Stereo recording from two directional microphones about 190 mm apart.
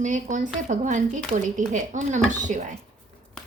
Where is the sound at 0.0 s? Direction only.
40° right (ahead or behind).